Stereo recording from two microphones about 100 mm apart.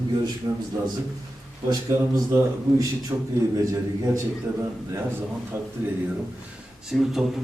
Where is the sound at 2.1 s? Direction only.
35° right (ahead or behind).